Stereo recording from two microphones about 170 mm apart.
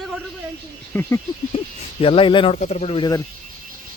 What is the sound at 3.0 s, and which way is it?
Speech, 20° left (ahead or behind).